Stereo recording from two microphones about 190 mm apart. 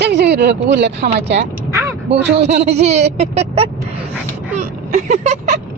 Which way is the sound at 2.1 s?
35° right (ahead or behind).